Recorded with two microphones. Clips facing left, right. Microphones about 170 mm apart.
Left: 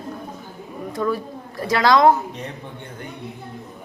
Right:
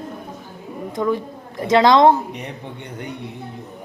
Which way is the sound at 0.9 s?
20° right (ahead or behind).